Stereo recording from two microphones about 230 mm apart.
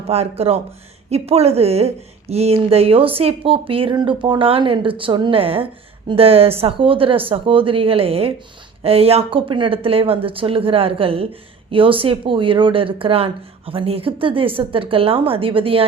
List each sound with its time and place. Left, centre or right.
0.1 s speech: right